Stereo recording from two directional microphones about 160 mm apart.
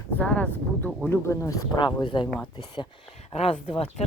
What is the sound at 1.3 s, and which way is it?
Speech, 20° left (ahead or behind).